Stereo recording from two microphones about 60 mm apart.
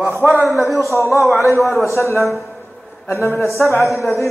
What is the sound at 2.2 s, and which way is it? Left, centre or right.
Speech, centre.